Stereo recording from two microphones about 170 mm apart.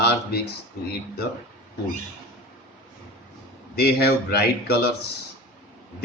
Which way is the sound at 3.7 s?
70° left (ahead or behind).